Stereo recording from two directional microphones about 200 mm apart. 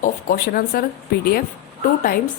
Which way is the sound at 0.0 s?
45° left (ahead or behind).